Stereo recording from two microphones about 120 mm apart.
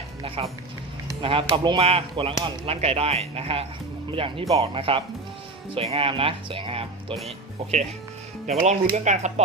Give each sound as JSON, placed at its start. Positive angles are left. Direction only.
{"t": 0.4, "sound": "speech", "side_deg": -50}
{"t": 1.8, "sound": "speech", "side_deg": -55}
{"t": 7.3, "sound": "speech", "side_deg": -70}